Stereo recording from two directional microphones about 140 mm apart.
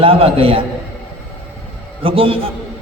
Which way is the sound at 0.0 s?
40° right (ahead or behind).